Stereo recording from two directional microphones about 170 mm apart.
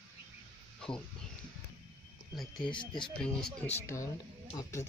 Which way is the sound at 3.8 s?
15° left (ahead or behind).